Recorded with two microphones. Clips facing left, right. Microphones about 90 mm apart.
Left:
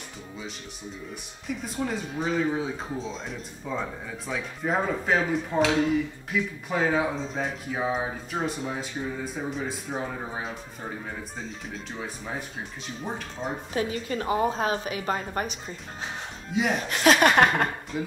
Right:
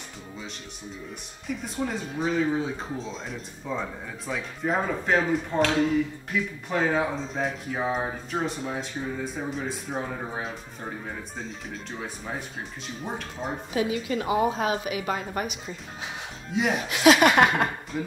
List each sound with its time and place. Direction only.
1.5 s speech: centre (ahead or behind)
13.7 s a woman's voice: 40° left (ahead or behind)
16.4 s speech: centre (ahead or behind)
16.8 s a woman's voice: 40° left (ahead or behind)
17.9 s speech: centre (ahead or behind)